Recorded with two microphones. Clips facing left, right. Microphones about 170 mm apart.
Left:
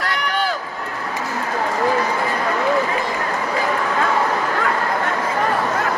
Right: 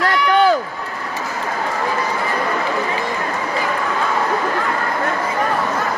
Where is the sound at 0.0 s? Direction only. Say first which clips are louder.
Right 8 dB; 50° right (ahead or behind).